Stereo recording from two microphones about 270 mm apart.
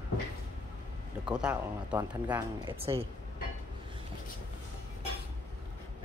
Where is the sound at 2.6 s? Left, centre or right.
Centre.